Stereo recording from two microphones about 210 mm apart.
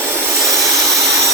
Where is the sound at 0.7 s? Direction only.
Centre (ahead or behind).